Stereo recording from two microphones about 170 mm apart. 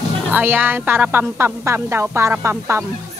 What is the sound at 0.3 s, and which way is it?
A woman's voice, 10° right (ahead or behind).